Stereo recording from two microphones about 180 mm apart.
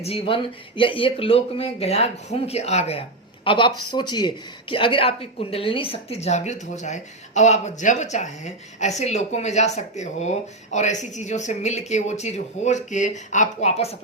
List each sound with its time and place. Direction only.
0.0 s a woman's voice: 30° left (ahead or behind)